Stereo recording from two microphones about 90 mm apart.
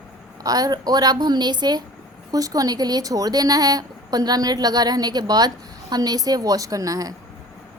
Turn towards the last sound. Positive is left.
turn(degrees=-40)  # may be behind; listen again after turning